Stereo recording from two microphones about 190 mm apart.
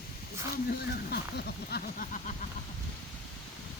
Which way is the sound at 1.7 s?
50° left (ahead or behind).